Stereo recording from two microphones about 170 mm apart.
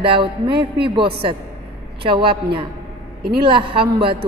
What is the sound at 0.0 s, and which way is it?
A woman's voice, 30° right (ahead or behind).